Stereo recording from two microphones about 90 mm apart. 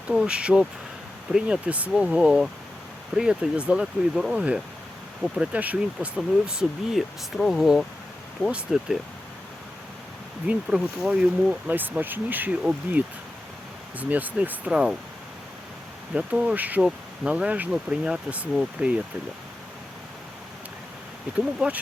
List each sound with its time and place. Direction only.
0.1 s speech: 10° right (ahead or behind)
10.4 s speech: 10° right (ahead or behind)
16.1 s speech: 15° right (ahead or behind)
21.3 s speech: 10° right (ahead or behind)